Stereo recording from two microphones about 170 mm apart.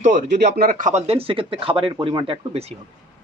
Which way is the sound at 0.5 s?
55° right (ahead or behind).